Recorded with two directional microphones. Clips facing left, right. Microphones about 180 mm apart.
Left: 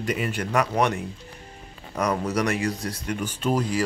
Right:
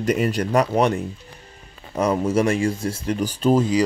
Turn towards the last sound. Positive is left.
turn(degrees=-25)  # may be behind; listen again after turning